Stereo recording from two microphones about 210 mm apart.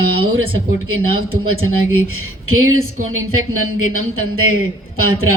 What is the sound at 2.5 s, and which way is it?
Speech, 80° right.